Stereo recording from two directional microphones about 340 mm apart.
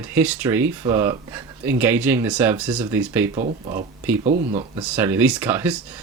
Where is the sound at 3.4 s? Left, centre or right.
Right.